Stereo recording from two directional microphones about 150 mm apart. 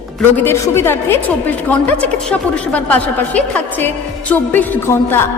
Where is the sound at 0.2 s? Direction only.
15° left (ahead or behind).